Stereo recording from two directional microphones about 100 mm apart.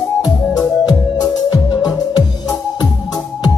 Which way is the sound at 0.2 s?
40° left (ahead or behind).